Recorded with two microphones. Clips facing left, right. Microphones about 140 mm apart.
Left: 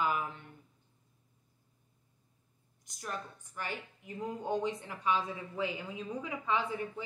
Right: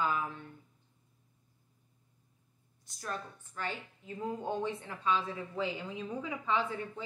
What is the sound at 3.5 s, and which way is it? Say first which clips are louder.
Speech: right 1 dB; 15° left (ahead or behind).